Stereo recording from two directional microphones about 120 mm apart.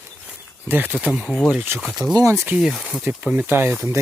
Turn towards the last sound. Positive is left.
turn(degrees=-15)  # may be behind; listen again after turning